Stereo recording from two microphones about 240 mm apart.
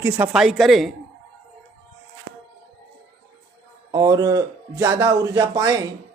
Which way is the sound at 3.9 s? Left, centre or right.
Centre.